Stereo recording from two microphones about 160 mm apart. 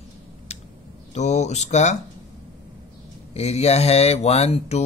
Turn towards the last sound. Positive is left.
turn(degrees=40)  # may be behind; listen again after turning